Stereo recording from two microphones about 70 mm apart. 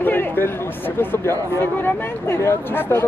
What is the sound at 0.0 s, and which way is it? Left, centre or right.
Speech, left.